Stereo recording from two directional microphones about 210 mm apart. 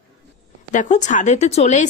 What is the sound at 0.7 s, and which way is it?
Speech, 35° left (ahead or behind).